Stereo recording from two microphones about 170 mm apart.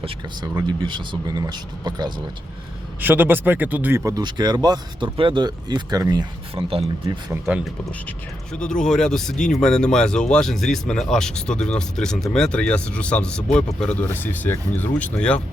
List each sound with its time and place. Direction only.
0.5 s speech: 25° right (ahead or behind)
3.0 s speech: 10° right (ahead or behind); by 7.2 s 35° right (ahead or behind)
7.4 s speech: centre (ahead or behind)